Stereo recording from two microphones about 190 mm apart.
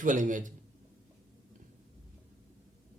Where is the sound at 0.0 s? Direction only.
40° right (ahead or behind).